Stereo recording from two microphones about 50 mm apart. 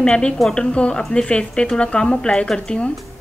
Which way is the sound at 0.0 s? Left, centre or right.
Centre.